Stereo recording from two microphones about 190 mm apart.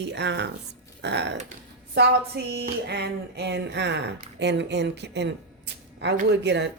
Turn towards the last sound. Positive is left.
turn(degrees=-65)  # may be behind; listen again after turning